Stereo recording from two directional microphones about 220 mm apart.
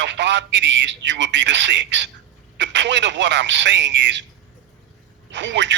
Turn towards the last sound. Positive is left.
turn(degrees=-55)  # may be behind; listen again after turning